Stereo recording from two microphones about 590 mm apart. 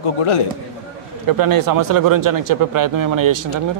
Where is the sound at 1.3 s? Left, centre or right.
Right.